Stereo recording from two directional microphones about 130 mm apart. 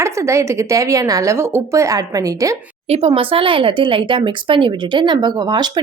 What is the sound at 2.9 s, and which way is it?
Speech, 50° right (ahead or behind).